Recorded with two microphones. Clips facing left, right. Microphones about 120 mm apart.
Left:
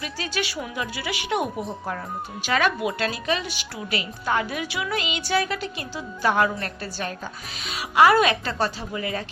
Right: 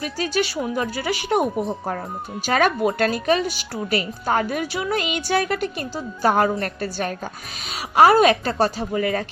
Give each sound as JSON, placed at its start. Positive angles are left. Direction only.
{"t": 0.0, "sound": "a woman's voice", "side_deg": -40}
{"t": 2.5, "sound": "a woman's voice", "side_deg": -45}
{"t": 6.2, "sound": "a woman's voice", "side_deg": -40}